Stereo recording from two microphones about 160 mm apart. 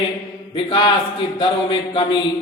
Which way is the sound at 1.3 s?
30° left (ahead or behind).